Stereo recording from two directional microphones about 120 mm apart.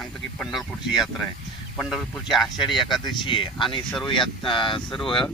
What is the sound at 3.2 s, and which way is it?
Speech, 45° left (ahead or behind).